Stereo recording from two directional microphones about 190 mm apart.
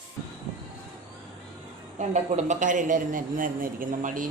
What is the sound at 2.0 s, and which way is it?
A man's voice, 40° right (ahead or behind).